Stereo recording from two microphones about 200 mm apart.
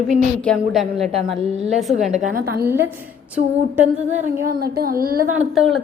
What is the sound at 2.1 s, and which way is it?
Speech, 45° right (ahead or behind).